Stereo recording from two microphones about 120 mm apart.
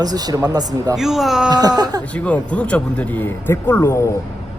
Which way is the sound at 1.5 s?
35° right (ahead or behind).